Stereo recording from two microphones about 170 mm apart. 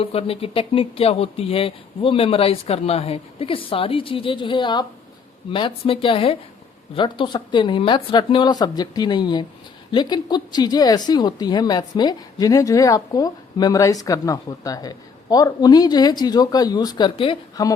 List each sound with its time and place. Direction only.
0.0 s speech: 35° left (ahead or behind)